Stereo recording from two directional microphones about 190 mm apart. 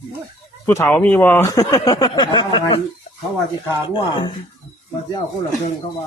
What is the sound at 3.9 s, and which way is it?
Speech, 25° left (ahead or behind).